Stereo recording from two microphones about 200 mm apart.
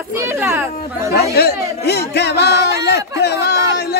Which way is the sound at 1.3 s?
55° left (ahead or behind).